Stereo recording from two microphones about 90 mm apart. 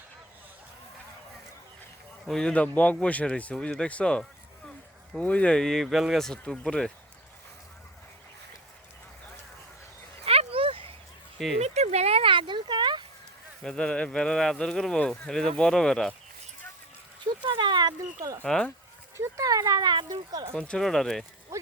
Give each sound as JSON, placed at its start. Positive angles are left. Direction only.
{"t": 2.2, "sound": "speech", "side_deg": 5}
{"t": 10.2, "sound": "a sound", "side_deg": -90}
{"t": 11.4, "sound": "speech", "side_deg": 0}
{"t": 12.1, "sound": "a sound", "side_deg": -75}
{"t": 13.6, "sound": "speech", "side_deg": 5}
{"t": 17.4, "sound": "speech", "side_deg": -60}
{"t": 18.4, "sound": "speech", "side_deg": 10}
{"t": 19.1, "sound": "speech", "side_deg": -35}
{"t": 20.5, "sound": "speech", "side_deg": 10}
{"t": 21.5, "sound": "speech", "side_deg": -35}